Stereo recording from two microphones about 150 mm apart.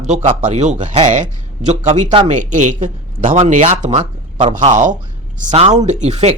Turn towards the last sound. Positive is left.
turn(degrees=-50)  # may be behind; listen again after turning